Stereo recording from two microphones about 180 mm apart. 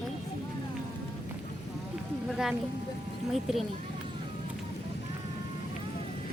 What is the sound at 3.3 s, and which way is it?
Speech, centre (ahead or behind).